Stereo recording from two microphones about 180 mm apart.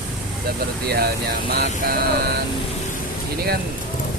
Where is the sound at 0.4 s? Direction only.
60° right (ahead or behind).